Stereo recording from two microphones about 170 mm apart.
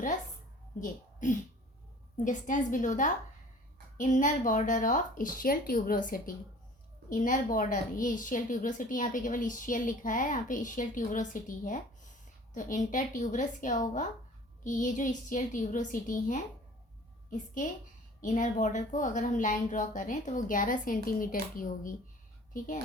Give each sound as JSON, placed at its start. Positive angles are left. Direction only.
{"t": 0.8, "sound": "a child's voice", "side_deg": 45}